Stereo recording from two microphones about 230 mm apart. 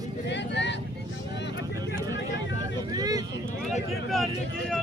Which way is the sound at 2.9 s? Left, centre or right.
Centre.